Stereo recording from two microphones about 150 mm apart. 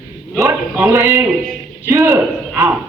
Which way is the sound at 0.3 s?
15° right (ahead or behind).